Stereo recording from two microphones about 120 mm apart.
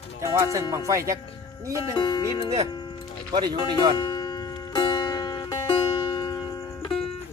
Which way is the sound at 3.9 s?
35° left (ahead or behind).